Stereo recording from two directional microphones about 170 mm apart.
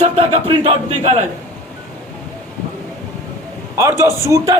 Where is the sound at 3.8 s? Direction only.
15° right (ahead or behind).